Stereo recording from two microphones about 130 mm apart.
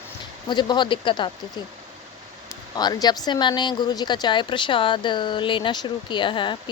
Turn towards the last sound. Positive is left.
turn(degrees=40)  # may be behind; listen again after turning